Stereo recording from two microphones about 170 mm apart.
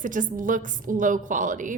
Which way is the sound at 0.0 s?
50° right (ahead or behind).